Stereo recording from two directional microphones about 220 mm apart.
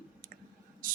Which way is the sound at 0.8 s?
40° right (ahead or behind).